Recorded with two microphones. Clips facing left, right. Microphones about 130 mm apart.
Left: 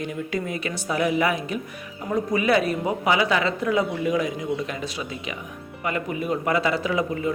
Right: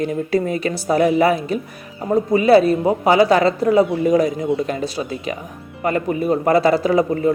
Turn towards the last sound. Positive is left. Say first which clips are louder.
# right 8 dB
turn(degrees=-40)  # may be behind; listen again after turning